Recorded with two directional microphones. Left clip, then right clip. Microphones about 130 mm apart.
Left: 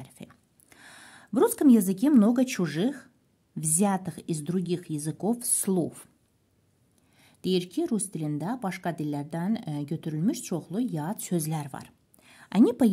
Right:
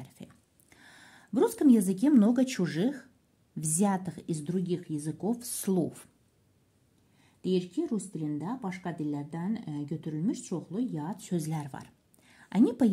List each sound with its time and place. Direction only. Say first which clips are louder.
0.0 s a sound: left 3 dB; 25° left (ahead or behind)
3.5 s a woman's voice: left 3 dB; 25° left (ahead or behind)
4.3 s speech: left 2 dB; 35° left (ahead or behind)
5.4 s a woman's voice: left 2 dB; 25° left (ahead or behind)
7.2 s speech: left 3 dB; 60° left (ahead or behind)
11.3 s speech: left 3 dB; 30° left (ahead or behind)